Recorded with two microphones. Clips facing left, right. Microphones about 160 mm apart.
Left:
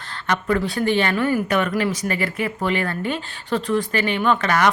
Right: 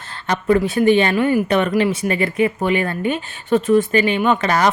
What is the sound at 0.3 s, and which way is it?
Speech, 20° right (ahead or behind).